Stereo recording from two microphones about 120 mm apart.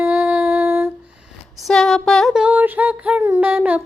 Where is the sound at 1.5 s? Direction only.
Centre (ahead or behind).